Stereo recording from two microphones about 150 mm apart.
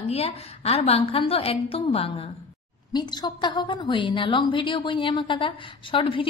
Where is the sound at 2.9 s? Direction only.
30° left (ahead or behind).